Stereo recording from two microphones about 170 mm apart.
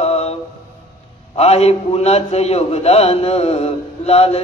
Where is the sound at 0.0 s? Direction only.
35° left (ahead or behind).